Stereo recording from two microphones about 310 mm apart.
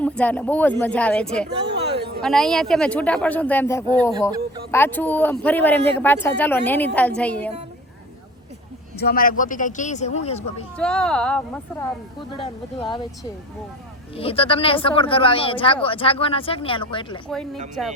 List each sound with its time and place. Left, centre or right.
0.0 s speech: centre
1.5 s a sound: right
2.2 s speech: centre
9.0 s speech: left
10.8 s speech: centre
12.8 s speech: centre
14.2 s speech: centre
17.2 s speech: centre